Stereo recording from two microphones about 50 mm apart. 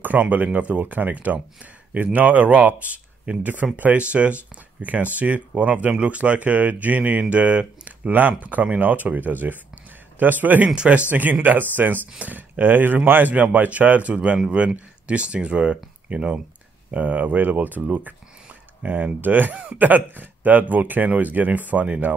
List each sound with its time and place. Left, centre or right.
0.0 s speech: right
8.1 s speech: right
10.7 s speech: right